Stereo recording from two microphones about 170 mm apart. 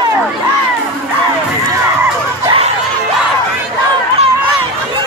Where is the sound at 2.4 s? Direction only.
35° right (ahead or behind).